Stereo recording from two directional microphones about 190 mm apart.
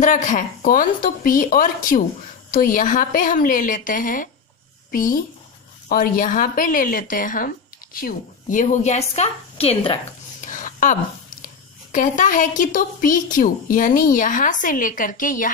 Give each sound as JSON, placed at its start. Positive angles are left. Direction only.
{"t": 0.0, "sound": "speech", "side_deg": 40}
{"t": 10.4, "sound": "speech", "side_deg": 45}